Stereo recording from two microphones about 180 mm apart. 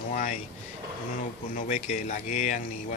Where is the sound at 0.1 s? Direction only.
45° left (ahead or behind).